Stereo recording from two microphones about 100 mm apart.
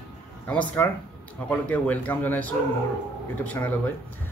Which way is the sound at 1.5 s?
15° left (ahead or behind).